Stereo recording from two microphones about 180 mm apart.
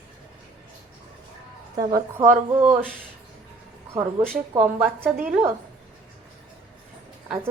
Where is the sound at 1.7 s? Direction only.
20° right (ahead or behind).